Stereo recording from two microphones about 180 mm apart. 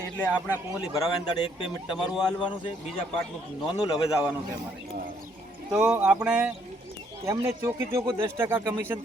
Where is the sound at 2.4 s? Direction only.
30° left (ahead or behind).